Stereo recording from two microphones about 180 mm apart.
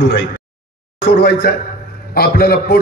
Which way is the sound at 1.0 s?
70° left (ahead or behind).